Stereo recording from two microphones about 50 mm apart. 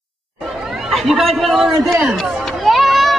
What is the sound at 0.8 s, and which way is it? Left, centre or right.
Chatter, centre.